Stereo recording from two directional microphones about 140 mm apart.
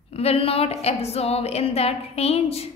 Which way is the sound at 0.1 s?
45° left (ahead or behind).